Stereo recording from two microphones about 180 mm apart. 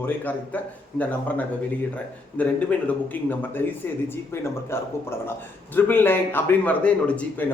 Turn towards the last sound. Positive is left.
turn(degrees=5)  # may be behind; listen again after turning